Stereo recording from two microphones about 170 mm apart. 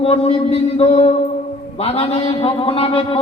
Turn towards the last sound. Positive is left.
turn(degrees=35)  # may be behind; listen again after turning